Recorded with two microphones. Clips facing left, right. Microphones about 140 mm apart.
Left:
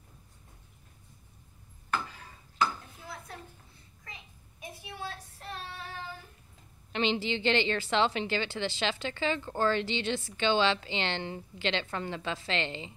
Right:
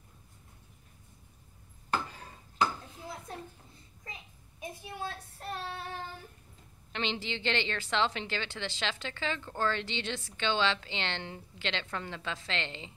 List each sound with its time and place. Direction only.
3.0 s dishes: 20° right (ahead or behind)
4.9 s child singing: 45° right (ahead or behind)
6.9 s a woman's voice: 5° left (ahead or behind)